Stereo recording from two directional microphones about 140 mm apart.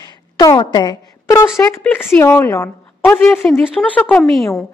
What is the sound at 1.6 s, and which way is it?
A woman's voice, 20° left (ahead or behind).